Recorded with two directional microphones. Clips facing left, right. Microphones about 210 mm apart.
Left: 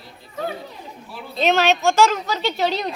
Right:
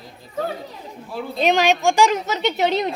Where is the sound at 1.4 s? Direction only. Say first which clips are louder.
Even; 15° right (ahead or behind).